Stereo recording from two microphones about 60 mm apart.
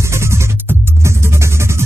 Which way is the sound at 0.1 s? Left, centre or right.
Right.